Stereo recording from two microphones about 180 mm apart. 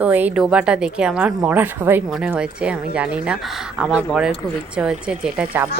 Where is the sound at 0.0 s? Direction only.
10° right (ahead or behind).